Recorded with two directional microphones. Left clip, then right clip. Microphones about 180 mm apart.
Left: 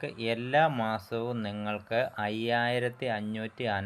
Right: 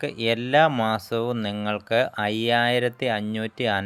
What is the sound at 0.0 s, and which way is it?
Speech, 25° right (ahead or behind).